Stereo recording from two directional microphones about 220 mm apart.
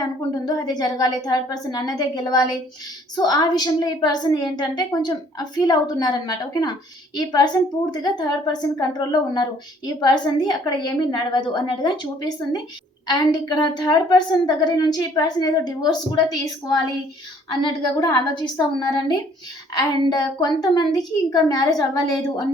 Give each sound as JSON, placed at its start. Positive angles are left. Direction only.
{"t": 0.4, "sound": "a woman's voice", "side_deg": 15}